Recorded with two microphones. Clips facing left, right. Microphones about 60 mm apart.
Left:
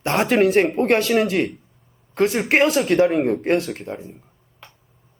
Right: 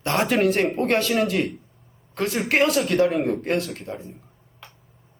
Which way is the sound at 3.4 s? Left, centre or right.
Centre.